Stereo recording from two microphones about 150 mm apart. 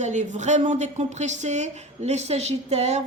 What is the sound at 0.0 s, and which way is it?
Speech, 55° right (ahead or behind).